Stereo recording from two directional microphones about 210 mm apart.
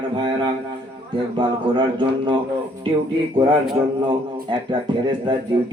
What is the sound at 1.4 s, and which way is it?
Speech, 20° right (ahead or behind).